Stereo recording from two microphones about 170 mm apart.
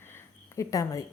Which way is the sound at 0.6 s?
20° left (ahead or behind).